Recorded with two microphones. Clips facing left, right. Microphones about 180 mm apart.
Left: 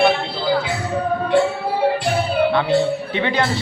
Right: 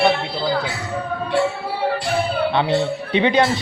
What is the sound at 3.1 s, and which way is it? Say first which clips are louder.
Speech: right 7 dB; 20° right (ahead or behind).